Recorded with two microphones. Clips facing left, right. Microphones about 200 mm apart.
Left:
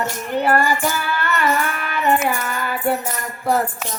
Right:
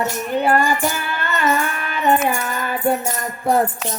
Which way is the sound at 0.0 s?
15° right (ahead or behind).